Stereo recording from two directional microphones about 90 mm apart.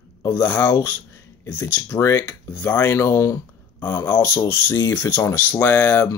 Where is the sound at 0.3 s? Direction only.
20° left (ahead or behind); by 3.3 s 35° left (ahead or behind).